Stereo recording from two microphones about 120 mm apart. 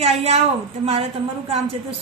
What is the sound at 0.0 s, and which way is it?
Speech, 55° right (ahead or behind).